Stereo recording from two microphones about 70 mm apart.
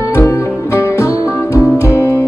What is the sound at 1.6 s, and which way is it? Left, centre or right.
Music, left.